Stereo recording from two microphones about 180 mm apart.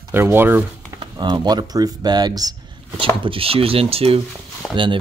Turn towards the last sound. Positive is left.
turn(degrees=5)  # may be behind; listen again after turning